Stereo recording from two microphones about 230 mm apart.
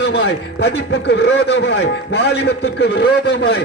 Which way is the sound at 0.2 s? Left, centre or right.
Left.